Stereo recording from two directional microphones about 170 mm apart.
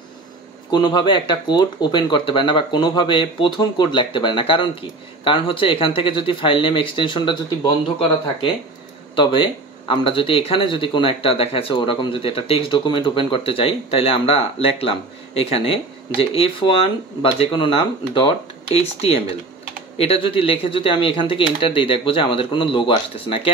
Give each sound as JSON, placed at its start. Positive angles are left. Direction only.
{"t": 0.7, "sound": "speech", "side_deg": 25}
{"t": 9.1, "sound": "speech", "side_deg": 30}